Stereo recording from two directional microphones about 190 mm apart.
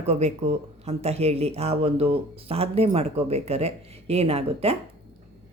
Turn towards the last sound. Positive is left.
turn(degrees=-30)  # may be behind; listen again after turning